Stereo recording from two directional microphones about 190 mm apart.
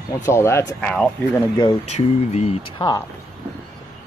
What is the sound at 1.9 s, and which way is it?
Speech, 35° left (ahead or behind).